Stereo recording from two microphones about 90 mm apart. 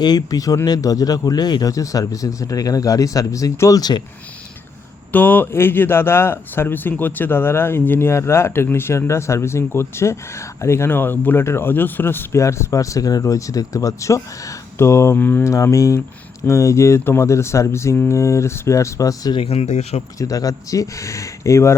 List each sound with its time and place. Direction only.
0.0 s speech: 50° left (ahead or behind)
5.1 s speech: 20° left (ahead or behind)
15.4 s speech: 35° left (ahead or behind)
19.3 s speech: 90° left
20.1 s speech: 40° left (ahead or behind)